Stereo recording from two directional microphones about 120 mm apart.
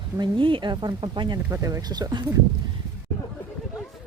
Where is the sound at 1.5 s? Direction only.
25° right (ahead or behind).